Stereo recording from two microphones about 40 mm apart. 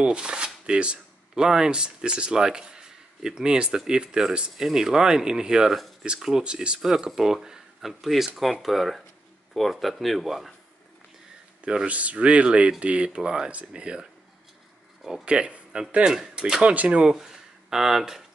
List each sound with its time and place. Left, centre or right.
0.0 s speech: right
4.6 s speech: centre
5.7 s speech: centre
6.4 s speech: right; by 10.5 s centre
11.6 s speech: right
15.2 s speech: right
16.6 s speech: right
17.0 s speech: centre